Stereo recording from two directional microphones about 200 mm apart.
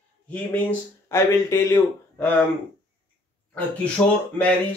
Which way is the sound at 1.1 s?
15° left (ahead or behind).